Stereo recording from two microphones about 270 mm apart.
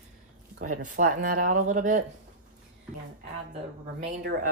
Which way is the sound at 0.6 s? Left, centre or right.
Right.